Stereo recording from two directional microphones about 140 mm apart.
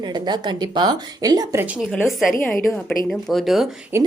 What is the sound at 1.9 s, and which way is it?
Speech, centre (ahead or behind).